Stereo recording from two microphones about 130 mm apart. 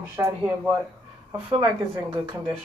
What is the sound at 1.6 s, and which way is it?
Speech, 10° right (ahead or behind).